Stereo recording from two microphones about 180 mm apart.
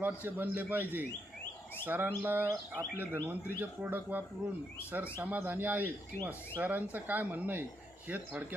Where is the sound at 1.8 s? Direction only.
10° right (ahead or behind).